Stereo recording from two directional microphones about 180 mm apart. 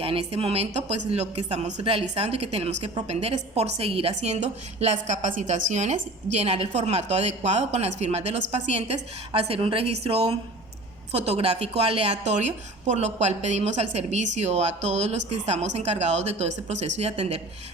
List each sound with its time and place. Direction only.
0.0 s a woman's voice: 30° right (ahead or behind)